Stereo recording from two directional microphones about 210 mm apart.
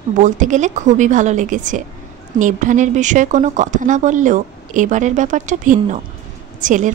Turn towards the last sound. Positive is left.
turn(degrees=-35)  # may be behind; listen again after turning